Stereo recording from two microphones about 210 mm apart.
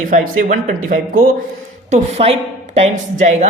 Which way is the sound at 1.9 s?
30° right (ahead or behind).